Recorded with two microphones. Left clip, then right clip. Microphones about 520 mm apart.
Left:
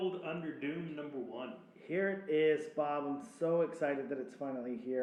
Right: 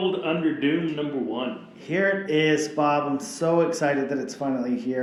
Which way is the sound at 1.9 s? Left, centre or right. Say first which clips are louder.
Right 11 dB; right.